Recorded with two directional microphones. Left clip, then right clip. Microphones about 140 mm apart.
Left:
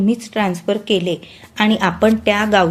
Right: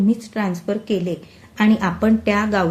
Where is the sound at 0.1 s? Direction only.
35° left (ahead or behind).